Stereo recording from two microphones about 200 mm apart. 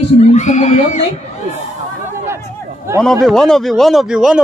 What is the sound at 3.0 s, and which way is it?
A man's voice, 5° left (ahead or behind).